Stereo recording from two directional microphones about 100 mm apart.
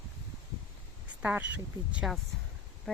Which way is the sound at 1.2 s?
15° right (ahead or behind).